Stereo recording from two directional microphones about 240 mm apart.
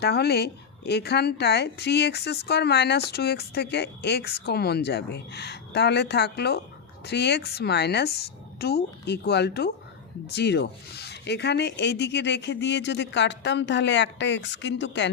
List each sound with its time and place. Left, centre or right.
0.0 s speech: left